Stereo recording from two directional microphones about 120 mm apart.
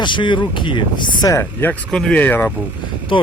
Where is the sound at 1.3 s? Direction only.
15° left (ahead or behind).